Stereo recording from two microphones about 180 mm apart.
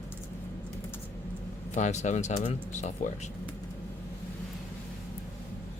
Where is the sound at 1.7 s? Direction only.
40° left (ahead or behind).